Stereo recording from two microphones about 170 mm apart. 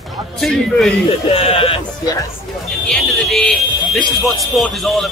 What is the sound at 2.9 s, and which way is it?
Speech, centre (ahead or behind).